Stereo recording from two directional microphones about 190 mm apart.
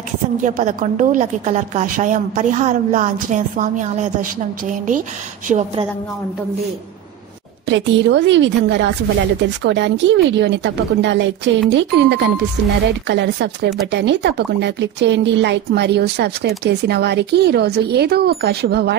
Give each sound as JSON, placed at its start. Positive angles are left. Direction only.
{"t": 0.4, "sound": "a woman's voice", "side_deg": -45}
{"t": 7.7, "sound": "a woman's voice", "side_deg": -70}